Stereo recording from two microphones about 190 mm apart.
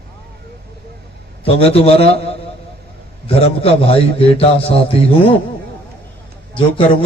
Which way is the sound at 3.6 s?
30° left (ahead or behind).